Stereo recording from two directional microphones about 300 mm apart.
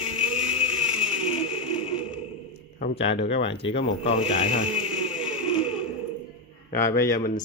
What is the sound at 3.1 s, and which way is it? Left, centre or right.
Speech, left.